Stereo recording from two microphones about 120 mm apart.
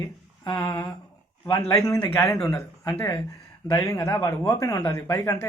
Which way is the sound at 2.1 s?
25° left (ahead or behind).